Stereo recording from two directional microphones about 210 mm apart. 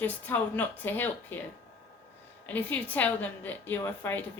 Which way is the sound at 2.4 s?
10° left (ahead or behind).